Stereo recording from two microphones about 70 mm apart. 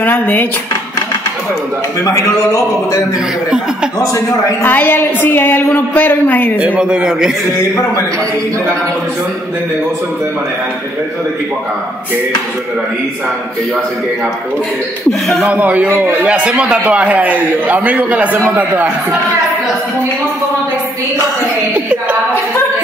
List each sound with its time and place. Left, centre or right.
0.0 s a woman's voice: left
2.0 s speech: left
3.4 s a man's voice: centre
4.6 s a woman's voice: left
6.6 s a man's voice: centre
15.0 s speech: centre
15.4 s a man's voice: right